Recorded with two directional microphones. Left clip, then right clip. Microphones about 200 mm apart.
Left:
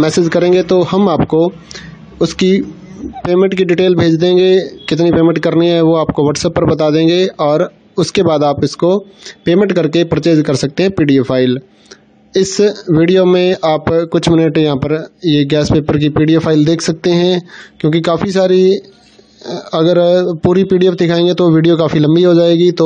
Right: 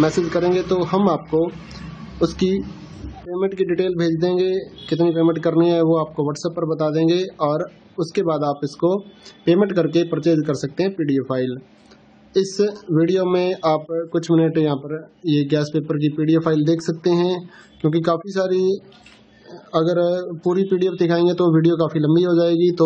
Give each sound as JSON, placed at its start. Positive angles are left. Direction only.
{"t": 0.0, "sound": "a man's voice", "side_deg": 40}